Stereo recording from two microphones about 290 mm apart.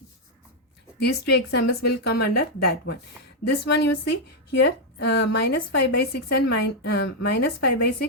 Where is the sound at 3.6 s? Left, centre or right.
Left.